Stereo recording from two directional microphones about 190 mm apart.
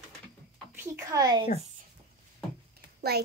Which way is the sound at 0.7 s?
10° right (ahead or behind).